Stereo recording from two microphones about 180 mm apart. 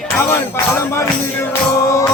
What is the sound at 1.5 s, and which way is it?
Music, 15° left (ahead or behind).